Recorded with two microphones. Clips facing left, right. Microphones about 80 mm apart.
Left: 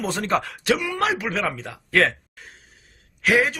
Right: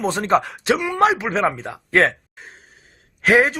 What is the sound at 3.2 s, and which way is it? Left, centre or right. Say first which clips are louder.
Speech: right 4 dB; right.